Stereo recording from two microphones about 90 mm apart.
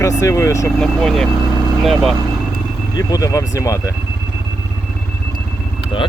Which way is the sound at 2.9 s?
40° left (ahead or behind).